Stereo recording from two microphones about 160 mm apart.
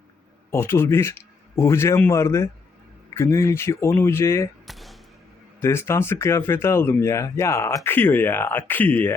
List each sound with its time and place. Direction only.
0.5 s speech: 15° left (ahead or behind)
4.6 s basketball bounce: centre (ahead or behind)
5.5 s speech: 15° left (ahead or behind)